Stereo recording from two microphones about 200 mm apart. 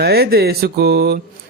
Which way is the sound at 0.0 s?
55° right (ahead or behind).